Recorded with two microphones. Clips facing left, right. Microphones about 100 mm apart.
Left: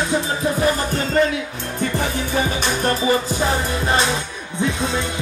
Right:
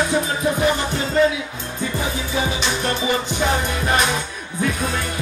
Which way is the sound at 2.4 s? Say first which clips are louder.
Left 2 dB; 45° left (ahead or behind).